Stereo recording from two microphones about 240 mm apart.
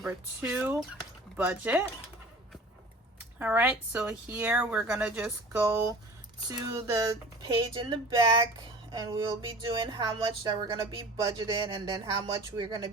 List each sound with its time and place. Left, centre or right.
0.0 s speech: centre
3.2 s speech: centre